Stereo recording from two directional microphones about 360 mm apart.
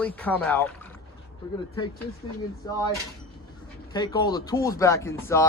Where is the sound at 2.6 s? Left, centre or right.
Centre.